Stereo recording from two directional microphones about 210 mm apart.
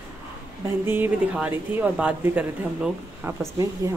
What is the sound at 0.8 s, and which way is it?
Speech, 10° right (ahead or behind).